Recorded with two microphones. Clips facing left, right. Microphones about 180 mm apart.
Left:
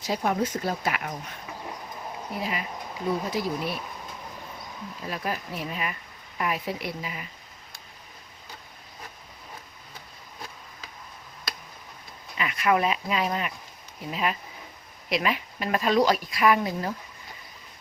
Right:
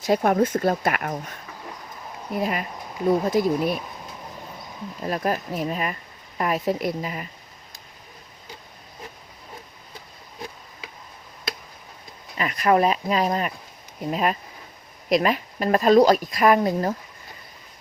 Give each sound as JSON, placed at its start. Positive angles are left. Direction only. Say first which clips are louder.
{"t": 0.0, "sound": "speech", "louder": "right 7 dB", "side_deg": -55}
{"t": 2.4, "sound": "speech", "louder": "right 6 dB", "side_deg": -50}
{"t": 5.0, "sound": "speech", "louder": "right 7 dB", "side_deg": -45}
{"t": 12.4, "sound": "speech", "louder": "right 5 dB", "side_deg": -40}